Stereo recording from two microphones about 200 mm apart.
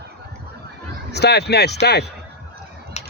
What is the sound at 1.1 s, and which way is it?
Speech, 55° left (ahead or behind).